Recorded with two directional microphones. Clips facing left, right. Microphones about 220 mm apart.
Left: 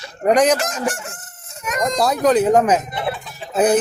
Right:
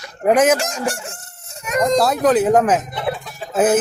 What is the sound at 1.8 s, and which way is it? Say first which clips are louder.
A man's voice: right 3 dB; 5° right (ahead or behind).